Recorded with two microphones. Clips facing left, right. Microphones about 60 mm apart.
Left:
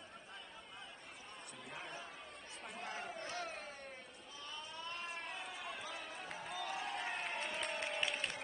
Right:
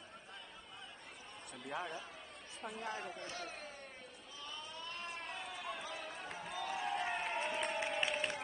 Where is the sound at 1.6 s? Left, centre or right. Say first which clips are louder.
Right 8 dB; right.